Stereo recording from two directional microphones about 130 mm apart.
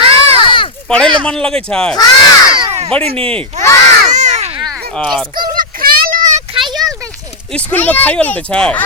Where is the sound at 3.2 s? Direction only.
5° left (ahead or behind).